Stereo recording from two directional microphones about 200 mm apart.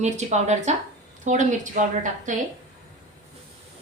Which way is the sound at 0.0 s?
35° right (ahead or behind).